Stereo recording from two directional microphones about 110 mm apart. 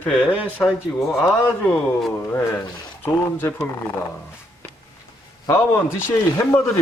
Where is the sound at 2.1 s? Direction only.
25° left (ahead or behind).